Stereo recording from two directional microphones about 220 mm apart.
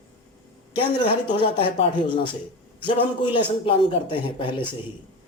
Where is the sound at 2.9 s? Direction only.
25° left (ahead or behind).